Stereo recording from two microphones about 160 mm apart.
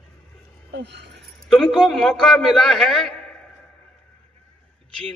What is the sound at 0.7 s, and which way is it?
Speech, 90° right.